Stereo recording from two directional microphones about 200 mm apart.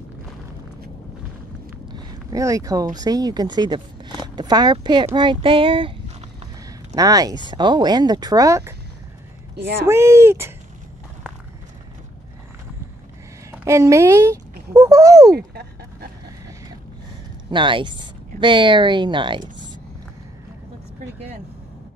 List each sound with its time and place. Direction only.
1.9 s speech: 20° right (ahead or behind)
7.0 s speech: 20° right (ahead or behind)
9.8 s speech: 15° right (ahead or behind)
13.5 s speech: 15° right (ahead or behind)
15.3 s a sound: 50° right (ahead or behind)
17.5 s speech: 25° right (ahead or behind)